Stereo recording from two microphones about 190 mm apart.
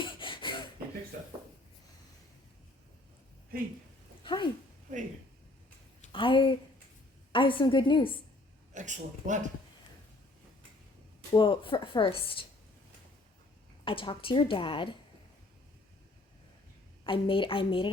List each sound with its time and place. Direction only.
0.0 s a sound: 25° left (ahead or behind)
4.2 s a sound: 25° left (ahead or behind)
6.1 s a woman's voice: 25° left (ahead or behind)
8.7 s speech: 40° right (ahead or behind)
11.3 s a woman's voice: 25° left (ahead or behind)
13.8 s a woman's voice: 25° left (ahead or behind)
17.0 s a woman's voice: 25° left (ahead or behind)